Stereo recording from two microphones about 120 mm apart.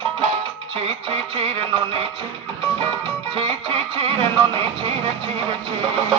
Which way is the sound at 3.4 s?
55° right (ahead or behind).